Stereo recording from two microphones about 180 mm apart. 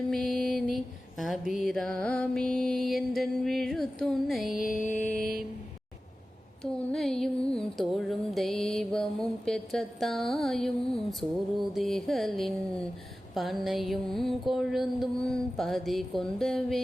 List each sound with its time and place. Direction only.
0.1 s mantra: centre (ahead or behind)
1.2 s music: centre (ahead or behind)
4.6 s music: 45° left (ahead or behind)
5.1 s a sound: 55° right (ahead or behind)
6.6 s music: centre (ahead or behind)